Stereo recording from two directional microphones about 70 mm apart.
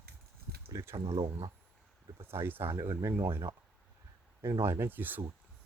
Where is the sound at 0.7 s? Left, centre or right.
Right.